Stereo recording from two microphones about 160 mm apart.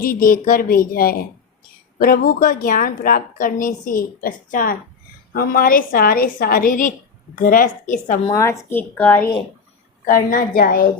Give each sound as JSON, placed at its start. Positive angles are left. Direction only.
{"t": 0.0, "sound": "a woman's voice", "side_deg": 65}
{"t": 8.3, "sound": "a woman's voice", "side_deg": 20}
{"t": 10.1, "sound": "a woman's voice", "side_deg": 60}